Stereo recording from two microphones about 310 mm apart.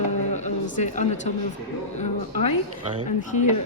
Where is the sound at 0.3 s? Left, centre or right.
Left.